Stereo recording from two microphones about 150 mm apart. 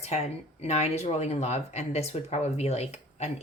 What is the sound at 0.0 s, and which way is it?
Speech, 45° left (ahead or behind).